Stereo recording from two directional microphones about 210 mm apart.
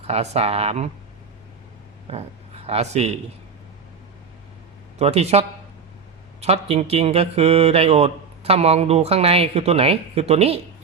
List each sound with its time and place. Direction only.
0.0 s speech: 30° right (ahead or behind)
2.0 s speech: 30° right (ahead or behind)
4.9 s speech: 30° right (ahead or behind)